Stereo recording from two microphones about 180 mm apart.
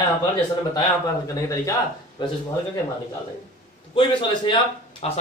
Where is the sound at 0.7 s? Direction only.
20° left (ahead or behind).